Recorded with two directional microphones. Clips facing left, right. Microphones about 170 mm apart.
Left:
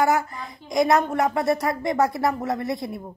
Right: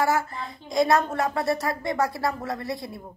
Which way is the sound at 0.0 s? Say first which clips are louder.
Left 3 dB; 20° left (ahead or behind).